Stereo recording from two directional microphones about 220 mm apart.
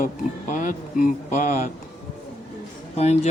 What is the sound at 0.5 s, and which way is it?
Speech, 35° left (ahead or behind).